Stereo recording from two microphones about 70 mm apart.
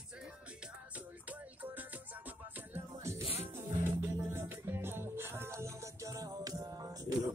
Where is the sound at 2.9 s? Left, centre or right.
Right.